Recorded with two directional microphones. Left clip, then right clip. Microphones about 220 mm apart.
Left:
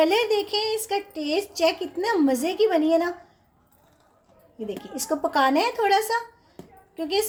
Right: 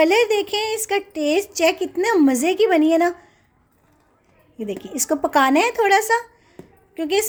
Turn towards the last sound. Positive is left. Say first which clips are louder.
# right 4 dB
turn(degrees=-40)  # may be behind; listen again after turning